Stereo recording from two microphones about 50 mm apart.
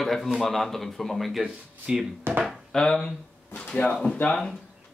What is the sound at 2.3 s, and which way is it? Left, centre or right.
Speech, right.